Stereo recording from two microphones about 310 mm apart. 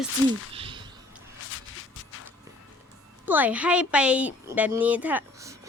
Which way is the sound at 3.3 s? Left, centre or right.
Centre.